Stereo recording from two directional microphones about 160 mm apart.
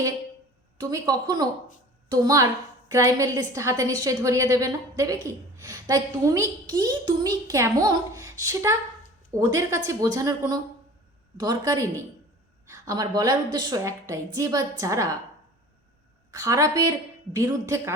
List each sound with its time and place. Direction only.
0.8 s a woman's voice: 20° right (ahead or behind)
16.3 s a woman's voice: 20° right (ahead or behind)